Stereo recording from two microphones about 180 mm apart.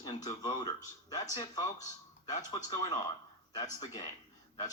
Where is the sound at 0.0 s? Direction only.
20° left (ahead or behind).